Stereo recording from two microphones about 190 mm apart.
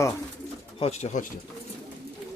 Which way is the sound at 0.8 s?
35° left (ahead or behind).